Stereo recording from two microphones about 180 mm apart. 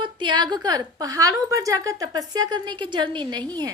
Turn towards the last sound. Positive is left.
turn(degrees=-25)  # may be behind; listen again after turning